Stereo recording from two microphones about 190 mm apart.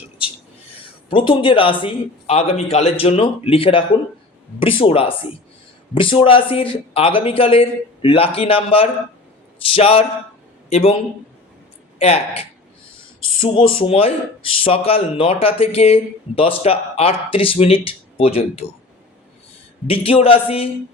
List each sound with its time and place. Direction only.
1.1 s a man's voice: 25° left (ahead or behind)
11.9 s speech: 30° left (ahead or behind)
19.9 s speech: 30° left (ahead or behind)